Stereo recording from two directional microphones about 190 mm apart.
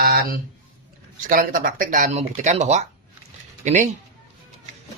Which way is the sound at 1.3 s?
45° right (ahead or behind).